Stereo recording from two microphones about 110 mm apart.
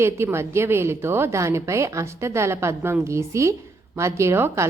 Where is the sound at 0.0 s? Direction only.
25° right (ahead or behind).